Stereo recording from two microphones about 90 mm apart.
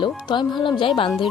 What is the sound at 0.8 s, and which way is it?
Speech, 75° left (ahead or behind).